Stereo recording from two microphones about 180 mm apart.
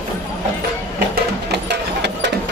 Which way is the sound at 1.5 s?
70° right (ahead or behind).